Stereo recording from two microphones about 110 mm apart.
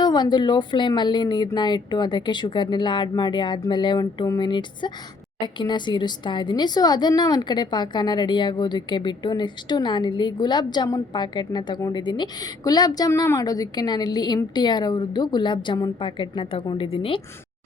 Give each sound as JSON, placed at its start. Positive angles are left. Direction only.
{"t": 0.0, "sound": "a woman's voice", "side_deg": 40}